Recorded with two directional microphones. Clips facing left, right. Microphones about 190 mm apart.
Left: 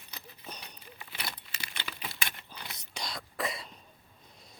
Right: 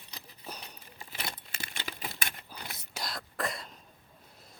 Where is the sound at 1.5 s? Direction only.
45° right (ahead or behind).